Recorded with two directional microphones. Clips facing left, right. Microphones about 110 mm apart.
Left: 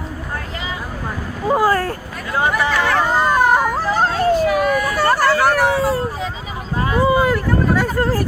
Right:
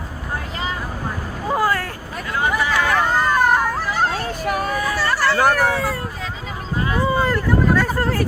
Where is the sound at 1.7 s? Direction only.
40° left (ahead or behind).